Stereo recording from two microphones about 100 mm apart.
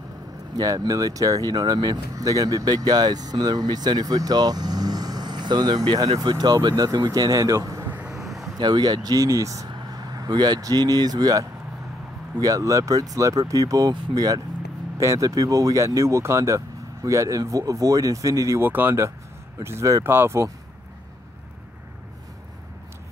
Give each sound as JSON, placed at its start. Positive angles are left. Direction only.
{"t": 0.6, "sound": "speech", "side_deg": -40}
{"t": 8.1, "sound": "vehicle", "side_deg": -5}
{"t": 8.5, "sound": "speech", "side_deg": -45}